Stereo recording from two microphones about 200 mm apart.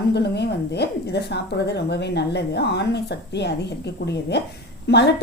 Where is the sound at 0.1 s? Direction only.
55° left (ahead or behind).